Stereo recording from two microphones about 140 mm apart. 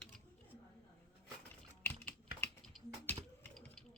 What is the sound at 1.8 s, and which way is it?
Typing, 15° left (ahead or behind).